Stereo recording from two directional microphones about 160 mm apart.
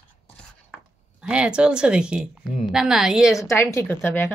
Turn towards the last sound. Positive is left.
turn(degrees=15)  # may be behind; listen again after turning